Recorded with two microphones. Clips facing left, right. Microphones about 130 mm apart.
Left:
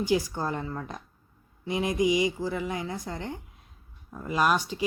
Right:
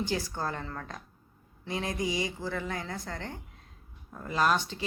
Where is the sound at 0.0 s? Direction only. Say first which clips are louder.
Left 5 dB; 15° left (ahead or behind).